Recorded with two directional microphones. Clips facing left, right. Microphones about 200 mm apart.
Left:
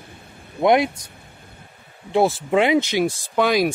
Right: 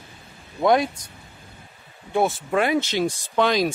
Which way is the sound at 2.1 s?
30° left (ahead or behind).